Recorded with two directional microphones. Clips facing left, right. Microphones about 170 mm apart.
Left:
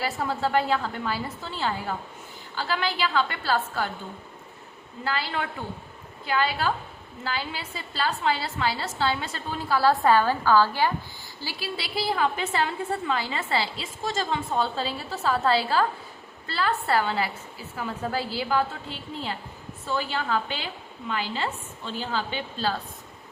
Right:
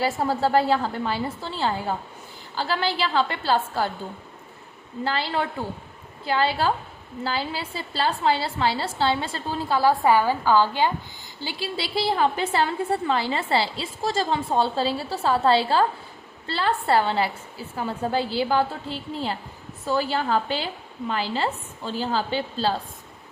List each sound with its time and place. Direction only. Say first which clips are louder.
0.0 s a woman's voice: right 4 dB; 35° right (ahead or behind)
5.0 s a woman's voice: right 3 dB; 30° right (ahead or behind)
9.8 s a woman's voice: right 1 dB; 10° right (ahead or behind); by 22.7 s 30° right (ahead or behind)